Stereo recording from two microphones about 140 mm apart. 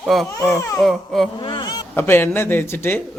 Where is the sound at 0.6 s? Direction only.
20° left (ahead or behind).